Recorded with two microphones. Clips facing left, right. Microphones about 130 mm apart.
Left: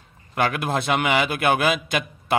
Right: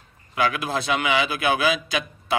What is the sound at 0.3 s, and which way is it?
A man's voice, 55° left (ahead or behind).